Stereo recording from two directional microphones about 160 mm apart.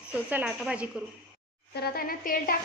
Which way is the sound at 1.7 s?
75° left (ahead or behind).